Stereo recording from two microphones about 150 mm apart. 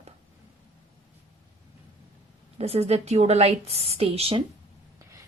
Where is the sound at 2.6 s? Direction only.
45° right (ahead or behind).